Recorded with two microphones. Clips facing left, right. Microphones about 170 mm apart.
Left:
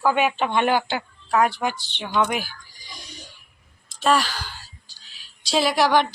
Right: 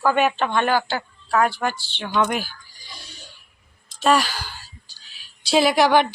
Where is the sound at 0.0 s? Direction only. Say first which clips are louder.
Right 1 dB; 10° left (ahead or behind).